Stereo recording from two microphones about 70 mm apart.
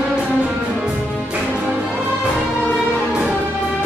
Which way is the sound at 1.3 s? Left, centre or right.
Centre.